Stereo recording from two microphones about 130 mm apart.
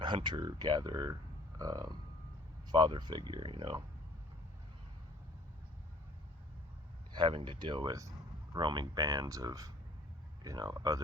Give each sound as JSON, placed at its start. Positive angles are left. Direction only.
{"t": 0.0, "sound": "speech", "side_deg": -35}
{"t": 7.1, "sound": "speech", "side_deg": -40}